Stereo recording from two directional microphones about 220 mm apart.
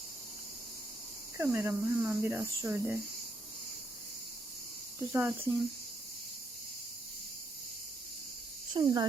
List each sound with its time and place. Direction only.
1.4 s speech: 10° right (ahead or behind)
4.9 s speech: 10° right (ahead or behind)
8.7 s speech: 20° right (ahead or behind)